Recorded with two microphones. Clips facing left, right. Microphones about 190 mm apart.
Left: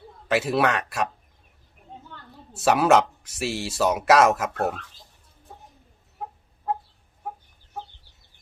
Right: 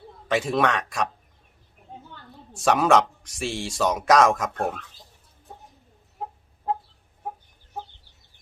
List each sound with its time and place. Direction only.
0.3 s speech: 5° left (ahead or behind)
2.5 s speech: 5° left (ahead or behind)